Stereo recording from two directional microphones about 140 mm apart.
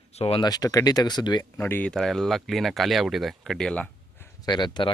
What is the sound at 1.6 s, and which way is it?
Speech, 15° left (ahead or behind).